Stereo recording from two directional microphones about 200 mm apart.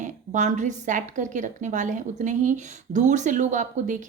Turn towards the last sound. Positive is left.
turn(degrees=-40)  # may be behind; listen again after turning